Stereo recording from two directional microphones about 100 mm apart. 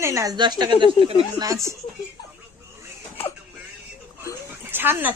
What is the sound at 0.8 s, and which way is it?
Speech, 65° right (ahead or behind).